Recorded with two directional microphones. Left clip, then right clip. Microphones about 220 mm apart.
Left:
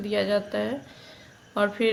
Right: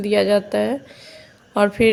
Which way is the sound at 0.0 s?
35° right (ahead or behind).